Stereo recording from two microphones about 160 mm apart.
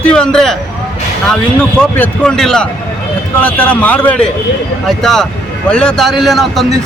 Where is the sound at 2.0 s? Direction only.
5° left (ahead or behind).